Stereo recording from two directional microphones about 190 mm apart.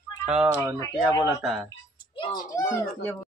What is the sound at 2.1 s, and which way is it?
Speech, 20° left (ahead or behind).